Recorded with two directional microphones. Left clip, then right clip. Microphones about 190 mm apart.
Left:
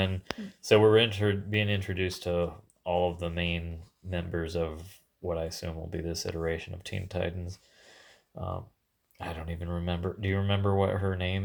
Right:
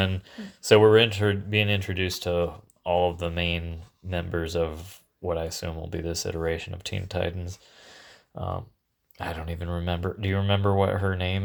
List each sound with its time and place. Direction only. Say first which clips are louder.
0.0 s speech: right 3 dB; 25° right (ahead or behind)